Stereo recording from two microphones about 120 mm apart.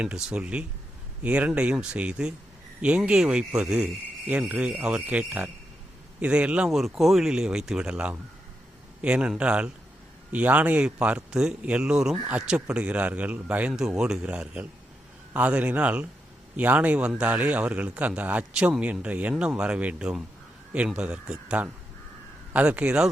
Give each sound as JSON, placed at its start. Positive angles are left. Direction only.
{"t": 0.0, "sound": "a man's voice", "side_deg": -5}